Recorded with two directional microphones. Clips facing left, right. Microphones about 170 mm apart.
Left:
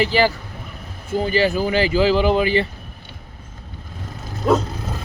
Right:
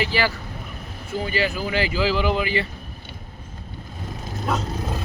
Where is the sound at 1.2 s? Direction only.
35° left (ahead or behind).